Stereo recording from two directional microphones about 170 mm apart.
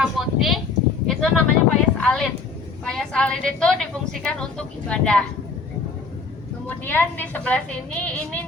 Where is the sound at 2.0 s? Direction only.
5° left (ahead or behind).